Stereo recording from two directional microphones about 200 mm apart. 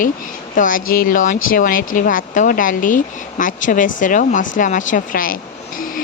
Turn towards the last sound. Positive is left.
turn(degrees=45)  # may be behind; listen again after turning